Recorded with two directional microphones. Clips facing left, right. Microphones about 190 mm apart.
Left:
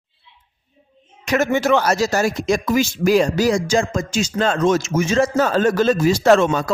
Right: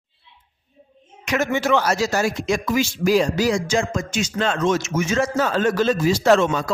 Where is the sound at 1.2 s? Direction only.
35° left (ahead or behind).